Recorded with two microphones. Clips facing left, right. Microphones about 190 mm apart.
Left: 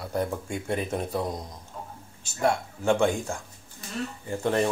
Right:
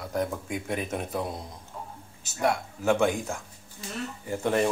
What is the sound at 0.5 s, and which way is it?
Speech, 30° left (ahead or behind).